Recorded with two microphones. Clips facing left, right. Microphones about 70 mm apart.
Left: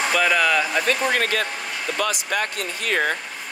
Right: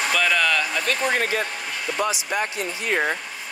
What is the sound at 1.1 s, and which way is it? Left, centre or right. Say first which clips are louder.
Speech: left 1 dB; left.